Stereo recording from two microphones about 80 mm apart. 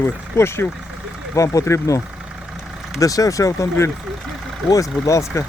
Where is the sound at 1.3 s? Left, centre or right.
Left.